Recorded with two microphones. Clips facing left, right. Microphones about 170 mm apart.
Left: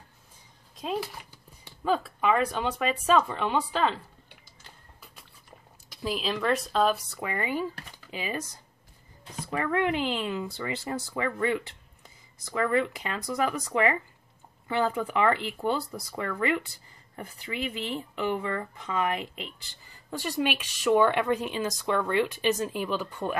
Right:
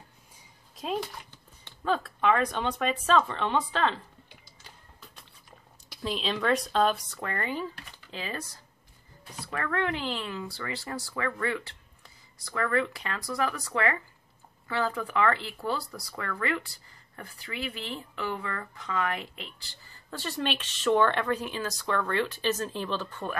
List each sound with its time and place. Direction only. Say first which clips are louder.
0.7 s speech: even; centre (ahead or behind)
6.0 s speech: even; 5° left (ahead or behind)